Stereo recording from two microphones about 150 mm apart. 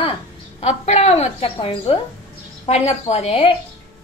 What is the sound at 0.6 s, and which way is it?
A woman's voice, 45° left (ahead or behind).